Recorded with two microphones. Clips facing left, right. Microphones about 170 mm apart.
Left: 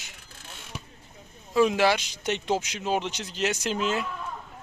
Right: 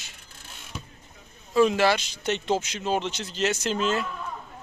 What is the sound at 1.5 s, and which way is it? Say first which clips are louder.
Speech: right 1 dB; 10° left (ahead or behind).